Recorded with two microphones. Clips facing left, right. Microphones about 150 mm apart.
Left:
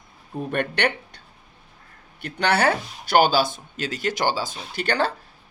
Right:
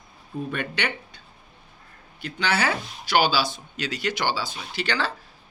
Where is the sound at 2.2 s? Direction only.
60° left (ahead or behind).